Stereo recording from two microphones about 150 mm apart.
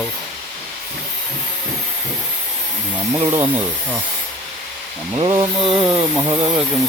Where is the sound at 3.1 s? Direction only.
25° right (ahead or behind).